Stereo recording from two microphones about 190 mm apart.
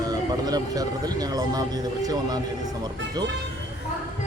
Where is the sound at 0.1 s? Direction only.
20° right (ahead or behind).